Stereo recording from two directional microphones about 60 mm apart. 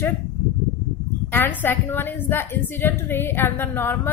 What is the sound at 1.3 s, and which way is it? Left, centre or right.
A woman's voice, left.